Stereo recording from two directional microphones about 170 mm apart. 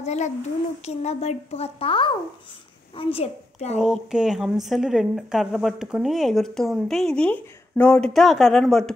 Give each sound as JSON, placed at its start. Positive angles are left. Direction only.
{"t": 0.0, "sound": "a child's voice", "side_deg": 40}
{"t": 3.8, "sound": "speech", "side_deg": -5}